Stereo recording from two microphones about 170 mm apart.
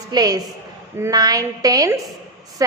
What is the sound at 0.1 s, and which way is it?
A woman's voice, 20° right (ahead or behind).